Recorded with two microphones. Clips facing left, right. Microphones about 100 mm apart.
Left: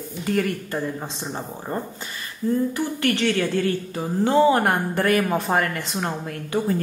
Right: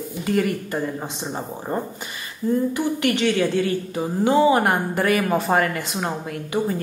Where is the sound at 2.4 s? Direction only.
15° right (ahead or behind).